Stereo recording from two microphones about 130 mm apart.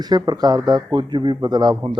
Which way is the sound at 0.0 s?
30° right (ahead or behind).